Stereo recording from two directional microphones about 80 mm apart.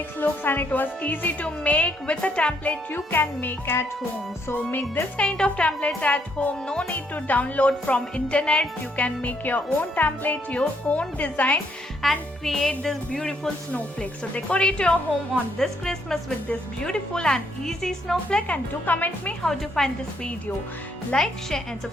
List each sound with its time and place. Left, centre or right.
0.2 s a woman's voice: left
2.9 s a woman's voice: left
5.1 s a woman's voice: centre
12.0 s music: centre
12.5 s speech: centre
19.4 s speech: centre